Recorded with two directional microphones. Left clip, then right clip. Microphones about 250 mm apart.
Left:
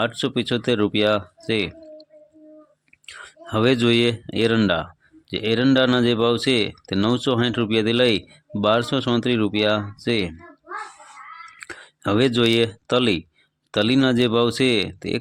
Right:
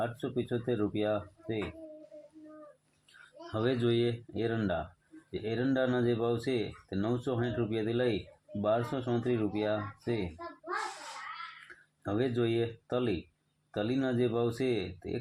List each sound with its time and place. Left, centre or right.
0.0 s speech: left
3.1 s speech: left
11.7 s speech: left